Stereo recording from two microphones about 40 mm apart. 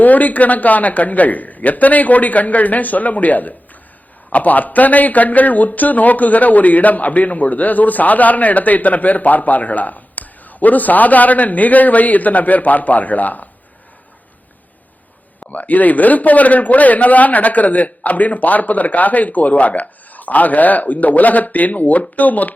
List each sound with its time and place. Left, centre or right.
0.0 s speech: left
15.4 s speech: left